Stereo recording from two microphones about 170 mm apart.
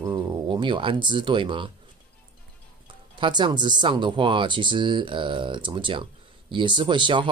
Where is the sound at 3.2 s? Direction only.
25° right (ahead or behind).